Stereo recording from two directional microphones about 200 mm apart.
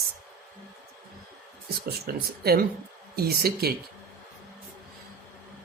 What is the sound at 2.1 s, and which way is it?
A man's voice, 50° right (ahead or behind).